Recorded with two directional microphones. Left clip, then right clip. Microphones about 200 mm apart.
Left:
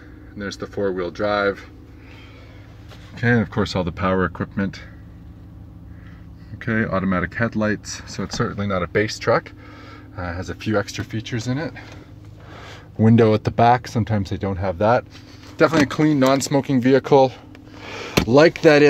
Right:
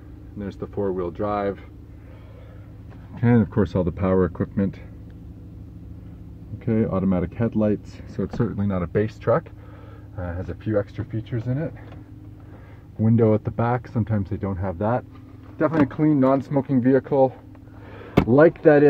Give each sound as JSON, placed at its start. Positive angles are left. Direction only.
{"t": 0.4, "sound": "speech", "side_deg": 0}
{"t": 3.2, "sound": "speech", "side_deg": -10}
{"t": 3.5, "sound": "speech", "side_deg": 5}
{"t": 6.9, "sound": "speech", "side_deg": 40}
{"t": 8.2, "sound": "speech", "side_deg": 10}
{"t": 8.5, "sound": "speech", "side_deg": -5}
{"t": 10.1, "sound": "speech", "side_deg": 10}
{"t": 13.0, "sound": "speech", "side_deg": 35}
{"t": 17.8, "sound": "a sound", "side_deg": 35}
{"t": 18.3, "sound": "speech", "side_deg": 25}